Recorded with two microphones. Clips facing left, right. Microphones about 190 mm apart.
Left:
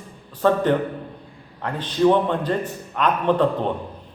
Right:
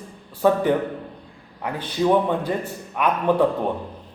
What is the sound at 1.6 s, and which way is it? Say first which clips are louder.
A man's voice: left 4 dB; 10° right (ahead or behind).